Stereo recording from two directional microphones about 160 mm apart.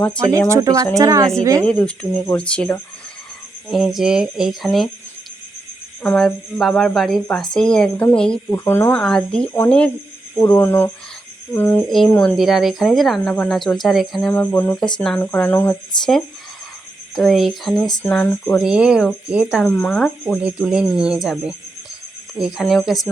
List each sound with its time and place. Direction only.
0.3 s speech: 20° right (ahead or behind)
1.6 s a woman's voice: 5° left (ahead or behind)
6.0 s a woman's voice: 5° left (ahead or behind)
17.2 s a woman's voice: centre (ahead or behind)
18.6 s a woman's voice: 5° right (ahead or behind)
19.7 s a woman's voice: 5° left (ahead or behind)
20.8 s speech: 25° left (ahead or behind)
21.1 s a woman's voice: 5° right (ahead or behind)